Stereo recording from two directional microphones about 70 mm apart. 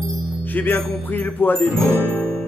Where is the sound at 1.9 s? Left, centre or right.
Left.